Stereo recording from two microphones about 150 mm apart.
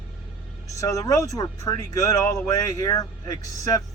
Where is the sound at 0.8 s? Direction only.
20° left (ahead or behind).